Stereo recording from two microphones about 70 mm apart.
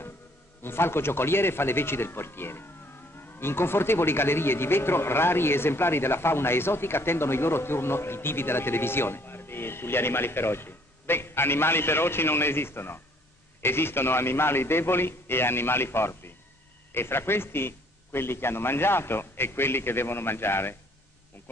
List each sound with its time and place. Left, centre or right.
0.6 s speech: left